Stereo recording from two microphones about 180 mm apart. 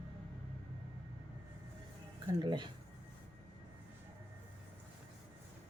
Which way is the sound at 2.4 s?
25° right (ahead or behind).